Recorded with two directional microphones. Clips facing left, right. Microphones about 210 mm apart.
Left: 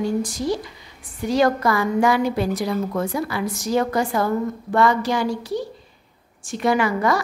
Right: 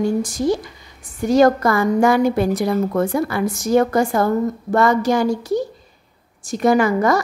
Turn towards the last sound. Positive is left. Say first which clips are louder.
# right 4 dB
turn(degrees=-45)  # may be behind; listen again after turning